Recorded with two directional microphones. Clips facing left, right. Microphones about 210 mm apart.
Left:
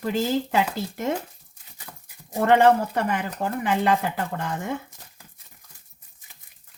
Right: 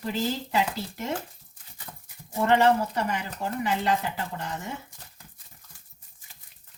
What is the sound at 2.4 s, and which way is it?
Speech, 55° left (ahead or behind).